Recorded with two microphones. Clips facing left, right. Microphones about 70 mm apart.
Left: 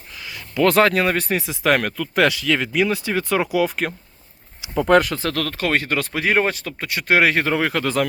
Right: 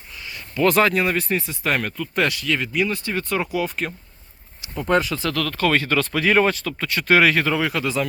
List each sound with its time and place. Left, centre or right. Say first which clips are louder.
0.1 s a sound: left 2 dB; left
0.7 s speech: left 2 dB; left
2.7 s speech: left 3 dB; left
4.8 s speech: left 5 dB; left
5.1 s speech: even; left